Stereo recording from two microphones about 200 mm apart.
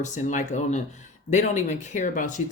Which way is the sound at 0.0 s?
40° left (ahead or behind).